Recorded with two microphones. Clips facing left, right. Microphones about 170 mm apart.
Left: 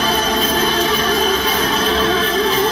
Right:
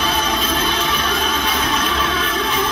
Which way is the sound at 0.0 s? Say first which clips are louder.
Left 3 dB; 35° left (ahead or behind).